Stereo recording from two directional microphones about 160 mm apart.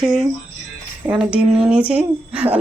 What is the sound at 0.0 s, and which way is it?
A woman's voice, centre (ahead or behind).